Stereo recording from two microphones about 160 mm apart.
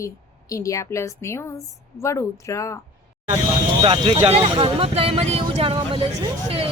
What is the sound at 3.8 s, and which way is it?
Speech, 35° right (ahead or behind).